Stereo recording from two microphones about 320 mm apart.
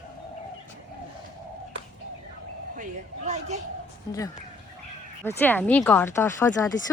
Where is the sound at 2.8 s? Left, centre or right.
Right.